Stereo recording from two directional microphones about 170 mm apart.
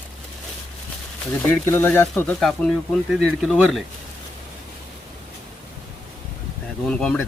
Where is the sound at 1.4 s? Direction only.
15° left (ahead or behind).